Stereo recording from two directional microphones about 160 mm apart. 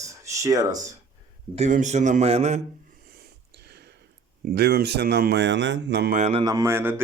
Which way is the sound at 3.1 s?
80° right.